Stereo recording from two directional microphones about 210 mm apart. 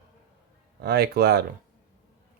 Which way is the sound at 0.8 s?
50° right (ahead or behind).